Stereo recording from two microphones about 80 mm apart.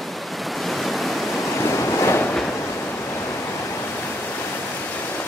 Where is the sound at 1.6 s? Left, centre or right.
Left.